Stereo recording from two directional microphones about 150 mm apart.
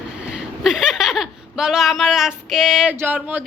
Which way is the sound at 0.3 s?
5° right (ahead or behind).